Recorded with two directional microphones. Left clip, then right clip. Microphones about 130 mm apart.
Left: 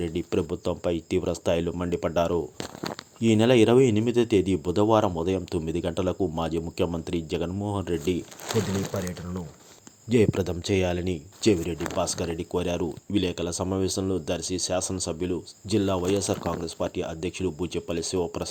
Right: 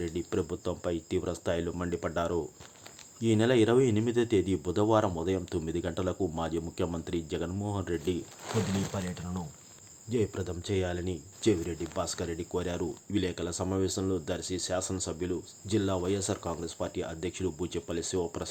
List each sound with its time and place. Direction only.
0.0 s speech: 35° left (ahead or behind)
10.1 s speech: 60° left (ahead or behind); by 18.4 s 25° left (ahead or behind)